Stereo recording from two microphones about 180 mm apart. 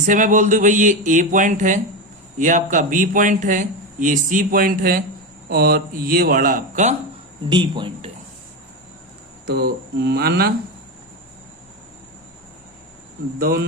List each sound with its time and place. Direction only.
0.0 s a man's voice: 45° right (ahead or behind)
7.5 s speech: 25° right (ahead or behind)
9.5 s speech: 60° right (ahead or behind)
13.4 s speech: 55° right (ahead or behind)